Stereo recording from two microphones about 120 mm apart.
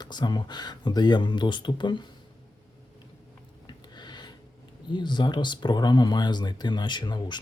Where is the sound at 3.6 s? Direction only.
35° left (ahead or behind).